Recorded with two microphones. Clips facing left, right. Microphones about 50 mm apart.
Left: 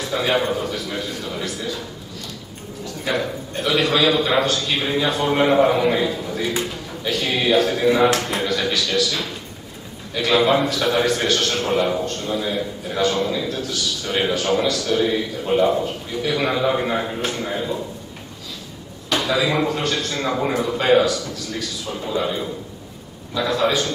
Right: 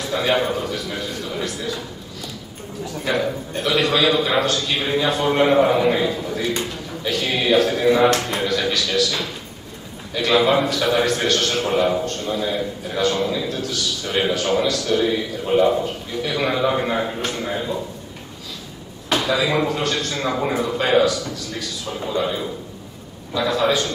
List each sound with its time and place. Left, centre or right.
0.0 s a man's voice: centre
3.1 s a man's voice: centre
19.1 s a man's voice: centre